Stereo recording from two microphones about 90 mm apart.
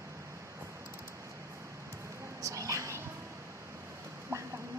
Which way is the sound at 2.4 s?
35° right (ahead or behind).